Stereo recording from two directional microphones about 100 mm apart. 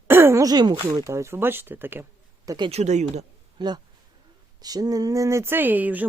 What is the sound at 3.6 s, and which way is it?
Speech, 50° right (ahead or behind).